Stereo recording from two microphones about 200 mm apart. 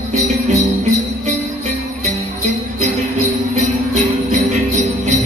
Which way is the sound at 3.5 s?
35° right (ahead or behind).